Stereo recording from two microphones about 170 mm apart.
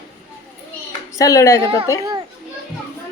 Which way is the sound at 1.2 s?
20° left (ahead or behind).